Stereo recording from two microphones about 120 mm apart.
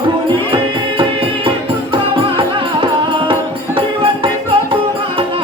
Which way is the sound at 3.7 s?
45° right (ahead or behind).